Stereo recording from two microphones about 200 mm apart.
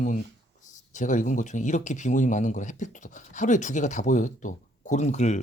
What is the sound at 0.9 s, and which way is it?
Speech, 40° left (ahead or behind).